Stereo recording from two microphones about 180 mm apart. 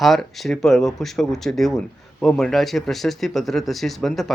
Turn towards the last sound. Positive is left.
turn(degrees=0)  # may be behind; listen again after turning